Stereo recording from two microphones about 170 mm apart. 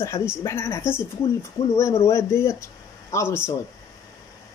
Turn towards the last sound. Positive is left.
turn(degrees=15)  # may be behind; listen again after turning